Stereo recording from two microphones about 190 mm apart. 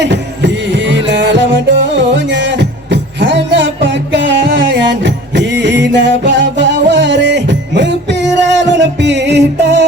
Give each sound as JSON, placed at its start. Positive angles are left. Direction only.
{"t": 0.0, "sound": "music", "side_deg": -70}